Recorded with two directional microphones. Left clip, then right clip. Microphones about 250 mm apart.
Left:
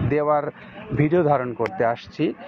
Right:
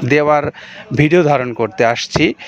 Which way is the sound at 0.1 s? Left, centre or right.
Right.